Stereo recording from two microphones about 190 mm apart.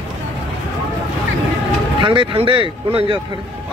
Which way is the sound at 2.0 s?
25° right (ahead or behind).